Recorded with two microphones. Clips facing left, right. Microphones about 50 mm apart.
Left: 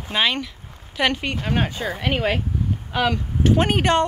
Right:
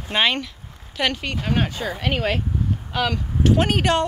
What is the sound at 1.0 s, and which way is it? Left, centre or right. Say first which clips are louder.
Speech: left 2 dB; left.